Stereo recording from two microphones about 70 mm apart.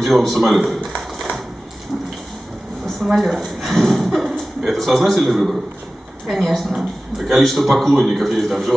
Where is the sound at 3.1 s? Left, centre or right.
Centre.